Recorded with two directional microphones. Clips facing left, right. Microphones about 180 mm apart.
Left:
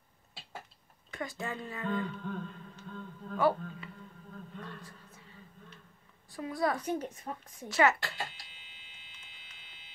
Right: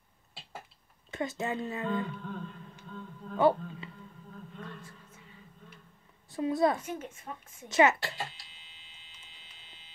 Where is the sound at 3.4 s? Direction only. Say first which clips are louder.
Right 3 dB; 25° right (ahead or behind).